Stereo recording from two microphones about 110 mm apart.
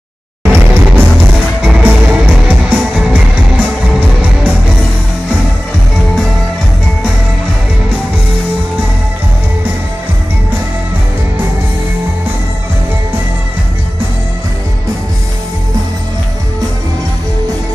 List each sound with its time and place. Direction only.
0.4 s music: 20° right (ahead or behind)